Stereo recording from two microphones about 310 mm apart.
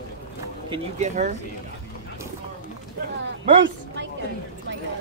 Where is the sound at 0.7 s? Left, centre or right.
Right.